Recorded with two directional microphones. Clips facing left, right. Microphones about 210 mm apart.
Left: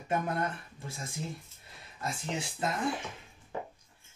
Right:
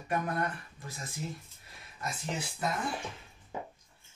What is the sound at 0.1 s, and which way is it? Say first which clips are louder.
Speech: left 1 dB; 25° left (ahead or behind).